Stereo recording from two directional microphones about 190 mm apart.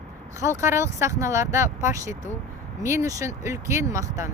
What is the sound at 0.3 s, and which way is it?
Speech, 15° right (ahead or behind).